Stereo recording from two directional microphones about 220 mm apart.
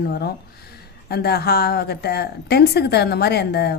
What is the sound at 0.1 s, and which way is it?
A woman's voice, 45° left (ahead or behind).